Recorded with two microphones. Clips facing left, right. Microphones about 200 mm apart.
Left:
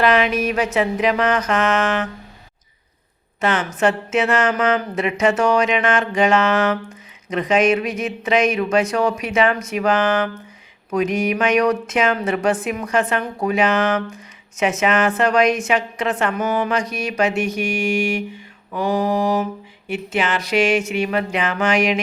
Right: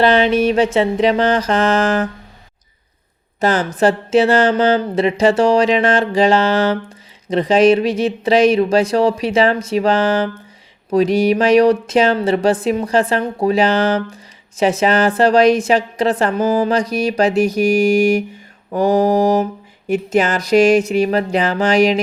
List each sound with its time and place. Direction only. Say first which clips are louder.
0.0 s speech: right 4 dB; 30° right (ahead or behind)
3.4 s speech: right 4 dB; 35° right (ahead or behind)